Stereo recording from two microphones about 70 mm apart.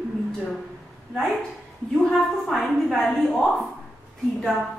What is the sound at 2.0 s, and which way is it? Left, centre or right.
A woman's voice, centre.